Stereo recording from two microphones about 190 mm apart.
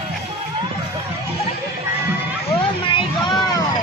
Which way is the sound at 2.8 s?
25° left (ahead or behind).